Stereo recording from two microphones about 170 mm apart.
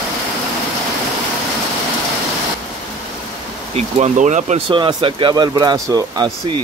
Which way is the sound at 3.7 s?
40° right (ahead or behind).